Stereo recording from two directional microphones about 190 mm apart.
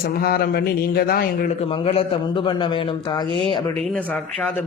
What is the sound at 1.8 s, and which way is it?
A man's voice, 30° left (ahead or behind).